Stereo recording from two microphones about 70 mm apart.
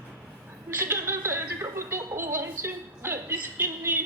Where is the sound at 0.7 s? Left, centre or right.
Right.